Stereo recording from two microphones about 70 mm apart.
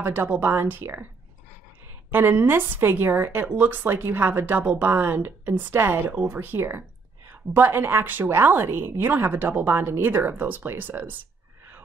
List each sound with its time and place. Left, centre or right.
0.0 s a woman's voice: right
2.0 s a woman's voice: right